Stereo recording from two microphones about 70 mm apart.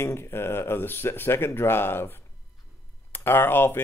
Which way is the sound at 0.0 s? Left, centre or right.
Left.